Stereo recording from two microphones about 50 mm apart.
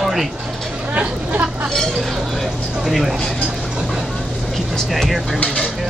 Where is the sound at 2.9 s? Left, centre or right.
Centre.